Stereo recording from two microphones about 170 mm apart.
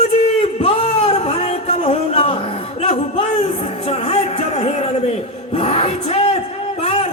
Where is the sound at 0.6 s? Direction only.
35° left (ahead or behind).